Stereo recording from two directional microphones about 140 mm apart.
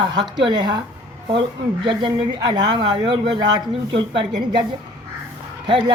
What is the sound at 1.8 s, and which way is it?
Speech, 35° right (ahead or behind).